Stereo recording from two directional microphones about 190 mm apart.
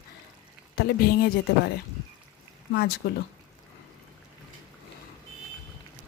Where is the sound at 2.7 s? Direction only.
55° left (ahead or behind).